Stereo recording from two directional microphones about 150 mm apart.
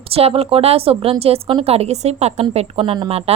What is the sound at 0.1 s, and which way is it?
A woman's voice, 40° right (ahead or behind).